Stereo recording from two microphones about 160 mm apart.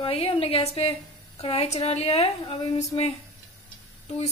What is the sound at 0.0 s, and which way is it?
A woman's voice, 35° left (ahead or behind).